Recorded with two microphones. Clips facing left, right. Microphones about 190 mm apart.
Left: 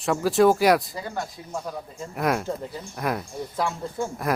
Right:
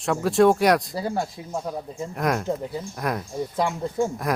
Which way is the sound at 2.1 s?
Centre (ahead or behind).